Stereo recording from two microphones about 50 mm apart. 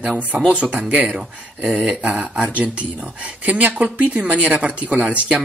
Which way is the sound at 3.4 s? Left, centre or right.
Right.